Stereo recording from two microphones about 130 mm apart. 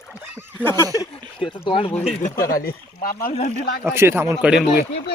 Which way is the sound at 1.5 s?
45° left (ahead or behind).